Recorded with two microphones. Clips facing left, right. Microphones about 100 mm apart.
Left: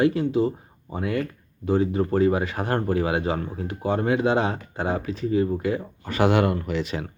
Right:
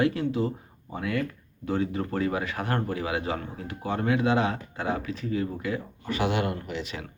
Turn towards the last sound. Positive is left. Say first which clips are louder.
# left 7 dB
turn(degrees=40)  # may be behind; listen again after turning